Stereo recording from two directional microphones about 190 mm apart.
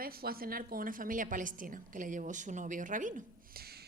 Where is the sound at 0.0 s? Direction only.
50° right (ahead or behind).